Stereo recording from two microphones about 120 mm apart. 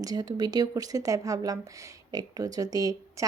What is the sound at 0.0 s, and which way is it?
A woman's voice, 35° right (ahead or behind).